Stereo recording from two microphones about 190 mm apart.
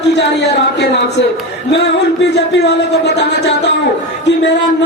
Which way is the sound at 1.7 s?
65° left (ahead or behind).